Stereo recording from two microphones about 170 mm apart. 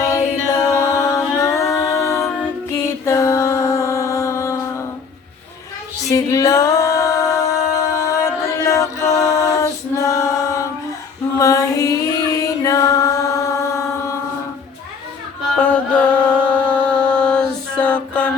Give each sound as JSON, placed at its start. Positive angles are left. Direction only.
{"t": 0.4, "sound": "a capella", "side_deg": 15}
{"t": 6.1, "sound": "singing", "side_deg": 20}
{"t": 11.3, "sound": "music", "side_deg": 20}
{"t": 15.5, "sound": "music", "side_deg": 10}